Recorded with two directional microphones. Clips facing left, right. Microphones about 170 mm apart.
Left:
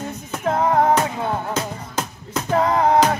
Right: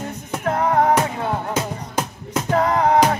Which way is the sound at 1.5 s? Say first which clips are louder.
Right 2 dB; 10° right (ahead or behind).